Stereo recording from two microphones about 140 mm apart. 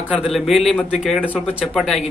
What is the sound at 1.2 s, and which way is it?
Speech, 10° left (ahead or behind).